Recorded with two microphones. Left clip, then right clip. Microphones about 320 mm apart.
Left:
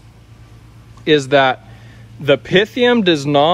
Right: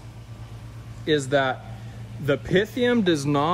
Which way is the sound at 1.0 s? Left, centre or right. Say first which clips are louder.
Left 10 dB; centre.